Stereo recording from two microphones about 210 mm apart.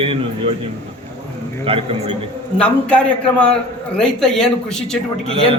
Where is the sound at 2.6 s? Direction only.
5° left (ahead or behind).